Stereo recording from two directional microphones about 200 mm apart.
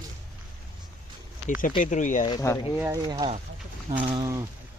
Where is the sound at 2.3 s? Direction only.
15° left (ahead or behind).